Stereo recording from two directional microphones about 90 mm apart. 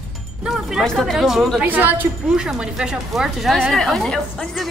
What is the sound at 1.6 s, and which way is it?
Speech, 20° right (ahead or behind).